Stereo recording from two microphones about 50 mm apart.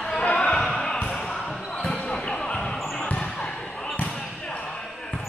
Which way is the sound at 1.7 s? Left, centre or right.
Centre.